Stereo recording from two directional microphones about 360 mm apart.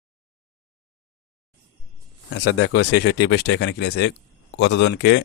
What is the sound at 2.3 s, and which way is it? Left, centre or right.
Speech, left.